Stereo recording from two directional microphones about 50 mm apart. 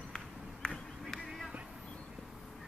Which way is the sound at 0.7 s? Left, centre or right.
Centre.